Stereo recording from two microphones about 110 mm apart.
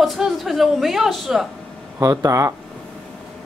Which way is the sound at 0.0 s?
Centre (ahead or behind).